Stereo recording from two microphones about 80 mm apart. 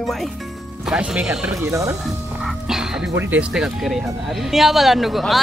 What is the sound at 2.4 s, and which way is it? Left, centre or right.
Music, centre.